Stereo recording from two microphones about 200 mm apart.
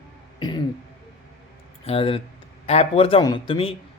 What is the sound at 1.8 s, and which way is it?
A man's voice, 30° left (ahead or behind).